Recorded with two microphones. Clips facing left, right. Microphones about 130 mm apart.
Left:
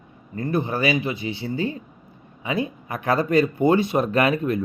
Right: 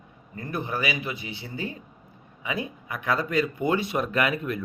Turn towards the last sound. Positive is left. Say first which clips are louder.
# left 6 dB
turn(degrees=30)  # may be behind; listen again after turning